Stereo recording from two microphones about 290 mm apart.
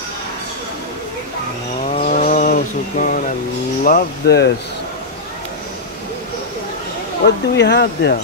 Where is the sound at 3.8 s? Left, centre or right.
Left.